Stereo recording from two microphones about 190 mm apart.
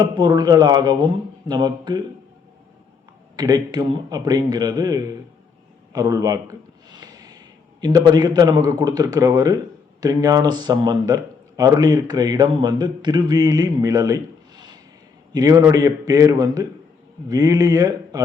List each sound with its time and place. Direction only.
0.0 s speech: 20° right (ahead or behind)
3.3 s a man's voice: 20° right (ahead or behind)